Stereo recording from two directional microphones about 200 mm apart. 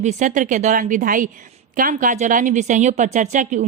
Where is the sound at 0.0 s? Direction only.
40° right (ahead or behind).